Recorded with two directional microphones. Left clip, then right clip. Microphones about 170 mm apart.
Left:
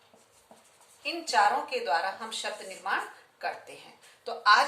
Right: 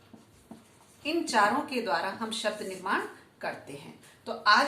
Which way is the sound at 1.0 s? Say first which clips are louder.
Even; 35° left (ahead or behind).